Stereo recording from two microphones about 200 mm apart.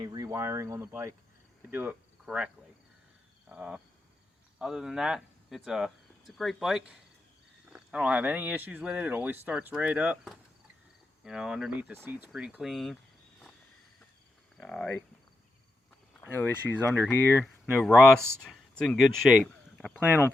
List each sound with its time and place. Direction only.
0.0 s speech: 20° right (ahead or behind)
3.5 s speech: 5° right (ahead or behind)
14.6 s speech: 5° left (ahead or behind)
16.3 s speech: 10° left (ahead or behind)